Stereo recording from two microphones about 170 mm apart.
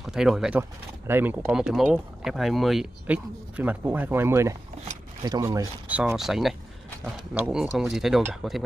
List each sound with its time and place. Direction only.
0.0 s speech: 5° right (ahead or behind); by 5.7 s 20° right (ahead or behind)
5.9 s speech: 10° right (ahead or behind)